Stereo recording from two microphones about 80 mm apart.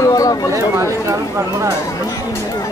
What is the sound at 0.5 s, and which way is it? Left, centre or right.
Speech, right.